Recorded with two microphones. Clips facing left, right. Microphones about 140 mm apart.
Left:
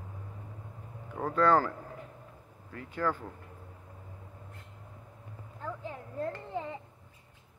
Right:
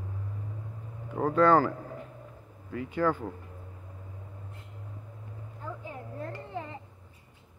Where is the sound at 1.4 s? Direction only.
Centre (ahead or behind).